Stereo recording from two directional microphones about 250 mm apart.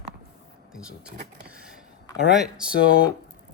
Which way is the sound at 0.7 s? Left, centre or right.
Centre.